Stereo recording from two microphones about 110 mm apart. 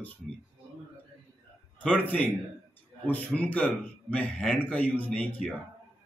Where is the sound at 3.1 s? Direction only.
15° left (ahead or behind).